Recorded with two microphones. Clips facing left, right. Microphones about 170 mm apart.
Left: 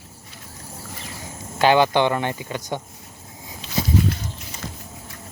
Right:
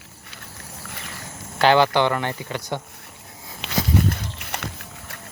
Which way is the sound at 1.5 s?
15° left (ahead or behind).